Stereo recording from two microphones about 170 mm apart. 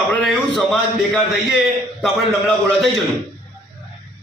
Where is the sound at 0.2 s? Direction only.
5° left (ahead or behind).